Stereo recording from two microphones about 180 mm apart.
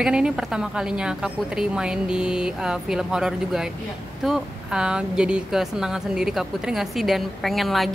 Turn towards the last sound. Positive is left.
turn(degrees=0)  # may be behind; listen again after turning